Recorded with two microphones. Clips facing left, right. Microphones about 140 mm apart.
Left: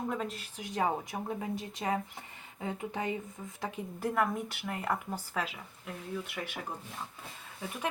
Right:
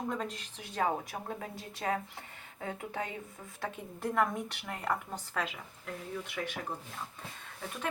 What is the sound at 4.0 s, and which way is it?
A woman's voice, 5° left (ahead or behind).